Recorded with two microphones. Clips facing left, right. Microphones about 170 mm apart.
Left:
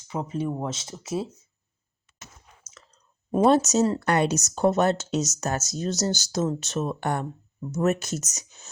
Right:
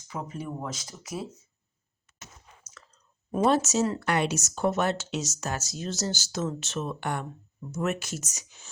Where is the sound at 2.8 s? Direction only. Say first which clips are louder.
Left 2 dB; 20° left (ahead or behind).